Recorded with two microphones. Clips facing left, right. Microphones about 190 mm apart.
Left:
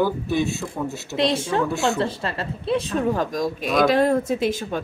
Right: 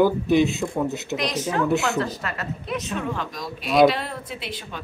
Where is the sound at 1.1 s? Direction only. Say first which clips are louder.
Left 5 dB; 30° left (ahead or behind).